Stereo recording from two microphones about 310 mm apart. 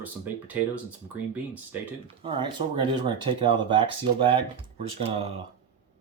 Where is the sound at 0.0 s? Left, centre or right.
Centre.